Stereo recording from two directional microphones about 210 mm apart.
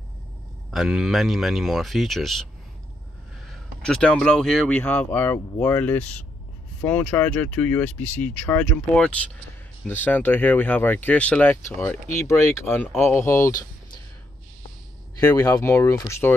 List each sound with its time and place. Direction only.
0.7 s speech: centre (ahead or behind)
3.8 s speech: 5° left (ahead or behind)
15.1 s speech: 15° left (ahead or behind)